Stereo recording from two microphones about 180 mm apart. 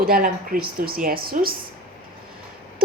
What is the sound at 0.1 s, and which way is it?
A woman's voice, 55° right (ahead or behind).